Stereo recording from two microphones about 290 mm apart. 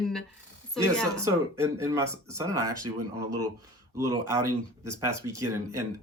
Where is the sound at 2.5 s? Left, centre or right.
Right.